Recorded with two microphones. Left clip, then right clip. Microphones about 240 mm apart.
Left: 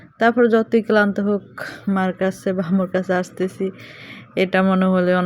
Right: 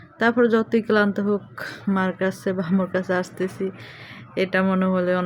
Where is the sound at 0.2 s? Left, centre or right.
Centre.